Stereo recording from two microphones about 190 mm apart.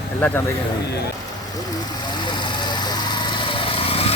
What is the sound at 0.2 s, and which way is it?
Speech, 10° left (ahead or behind).